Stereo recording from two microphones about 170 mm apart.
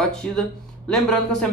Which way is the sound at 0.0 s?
5° left (ahead or behind).